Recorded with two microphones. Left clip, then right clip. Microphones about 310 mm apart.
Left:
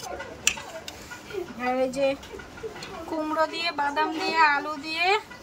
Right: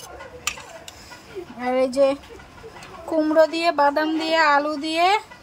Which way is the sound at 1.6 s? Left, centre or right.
Centre.